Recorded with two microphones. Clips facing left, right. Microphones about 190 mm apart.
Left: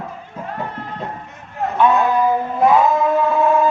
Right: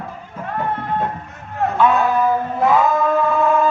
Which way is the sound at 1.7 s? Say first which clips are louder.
Left 1 dB; 20° left (ahead or behind).